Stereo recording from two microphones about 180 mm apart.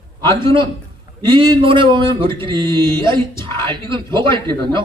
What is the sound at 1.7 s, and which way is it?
A man's voice, 25° right (ahead or behind).